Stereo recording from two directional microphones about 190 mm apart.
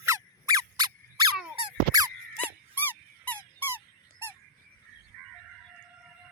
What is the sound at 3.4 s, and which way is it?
Squeak, 10° right (ahead or behind).